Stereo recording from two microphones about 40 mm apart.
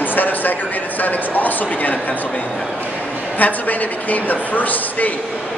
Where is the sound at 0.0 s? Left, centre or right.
Left.